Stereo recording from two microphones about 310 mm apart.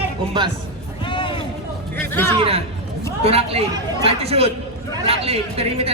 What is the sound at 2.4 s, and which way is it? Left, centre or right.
A man's voice, centre.